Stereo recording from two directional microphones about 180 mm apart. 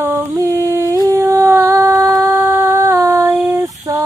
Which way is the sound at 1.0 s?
15° right (ahead or behind).